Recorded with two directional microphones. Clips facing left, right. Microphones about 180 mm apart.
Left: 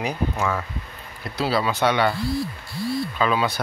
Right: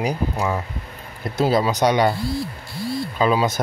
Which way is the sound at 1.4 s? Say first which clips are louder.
Right 4 dB; 45° right (ahead or behind).